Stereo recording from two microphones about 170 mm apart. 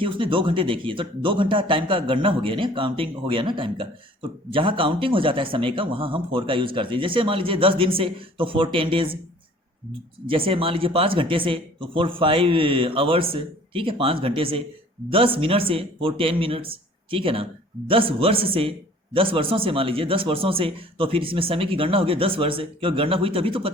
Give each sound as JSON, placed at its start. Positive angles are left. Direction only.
{"t": 0.0, "sound": "speech", "side_deg": -30}
{"t": 10.2, "sound": "speech", "side_deg": -30}